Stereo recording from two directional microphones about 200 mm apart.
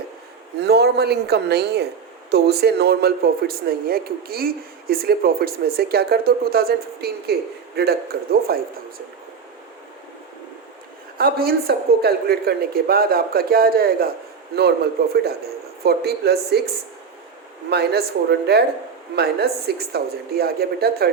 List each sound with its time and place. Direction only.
0.6 s speech: 55° right (ahead or behind)
11.2 s speech: 50° right (ahead or behind)
15.1 s speech: 50° right (ahead or behind)